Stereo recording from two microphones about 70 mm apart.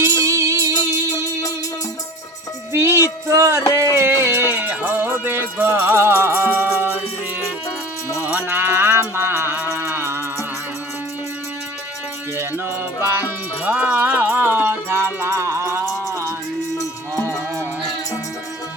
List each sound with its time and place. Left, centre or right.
0.1 s music: right
0.7 s music: left
2.7 s music: right
8.2 s a sound: centre
8.4 s music: right
12.4 s music: right
13.7 s music: centre; by 15.9 s right